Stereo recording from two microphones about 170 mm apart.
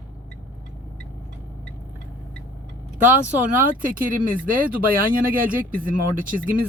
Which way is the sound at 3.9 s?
55° right (ahead or behind).